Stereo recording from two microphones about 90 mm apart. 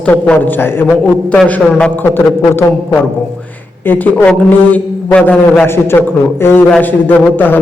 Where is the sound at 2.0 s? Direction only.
25° left (ahead or behind).